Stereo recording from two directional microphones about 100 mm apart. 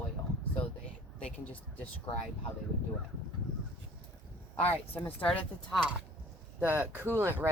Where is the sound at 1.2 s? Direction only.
15° left (ahead or behind).